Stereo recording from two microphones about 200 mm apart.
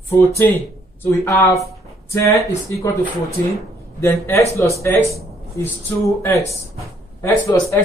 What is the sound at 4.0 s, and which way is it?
Speech, 15° left (ahead or behind).